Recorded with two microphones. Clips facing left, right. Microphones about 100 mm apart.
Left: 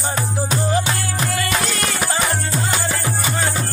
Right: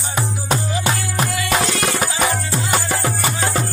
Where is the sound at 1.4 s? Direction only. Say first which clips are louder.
Right 3 dB; centre (ahead or behind).